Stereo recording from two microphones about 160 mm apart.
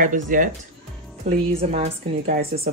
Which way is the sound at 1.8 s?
55° right (ahead or behind).